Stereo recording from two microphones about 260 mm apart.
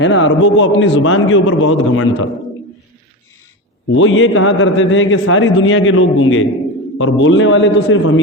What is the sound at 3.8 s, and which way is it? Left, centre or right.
A man's voice, left.